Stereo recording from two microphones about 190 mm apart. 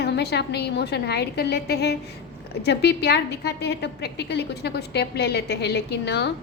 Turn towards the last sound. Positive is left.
turn(degrees=60)  # may be behind; listen again after turning